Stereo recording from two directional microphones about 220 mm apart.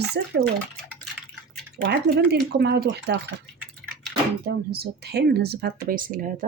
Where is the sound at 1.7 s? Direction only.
45° right (ahead or behind).